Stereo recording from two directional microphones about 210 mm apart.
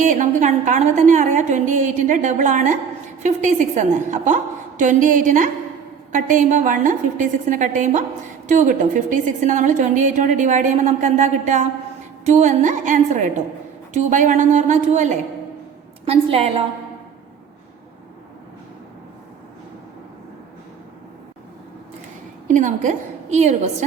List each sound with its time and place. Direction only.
0.0 s a woman's voice: 35° right (ahead or behind)
22.4 s a woman's voice: 35° right (ahead or behind)